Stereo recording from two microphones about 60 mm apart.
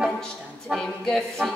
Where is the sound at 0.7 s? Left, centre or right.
Centre.